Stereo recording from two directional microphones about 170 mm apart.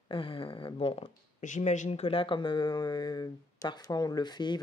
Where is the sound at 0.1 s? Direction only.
30° left (ahead or behind).